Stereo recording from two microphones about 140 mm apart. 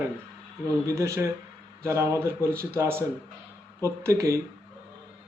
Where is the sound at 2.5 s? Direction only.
90° right.